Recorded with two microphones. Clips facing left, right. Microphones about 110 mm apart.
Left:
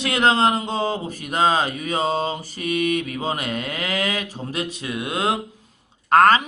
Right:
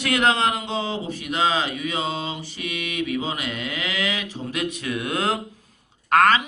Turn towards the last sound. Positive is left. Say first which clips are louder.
# left 3 dB
turn(degrees=35)  # may be behind; listen again after turning